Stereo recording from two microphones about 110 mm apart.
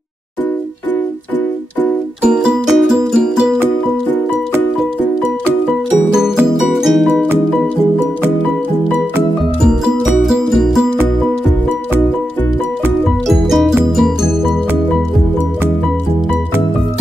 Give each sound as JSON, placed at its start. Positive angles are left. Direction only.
{"t": 2.2, "sound": "music", "side_deg": -5}
{"t": 6.1, "sound": "music", "side_deg": -5}
{"t": 9.6, "sound": "music", "side_deg": -5}
{"t": 13.3, "sound": "music", "side_deg": 0}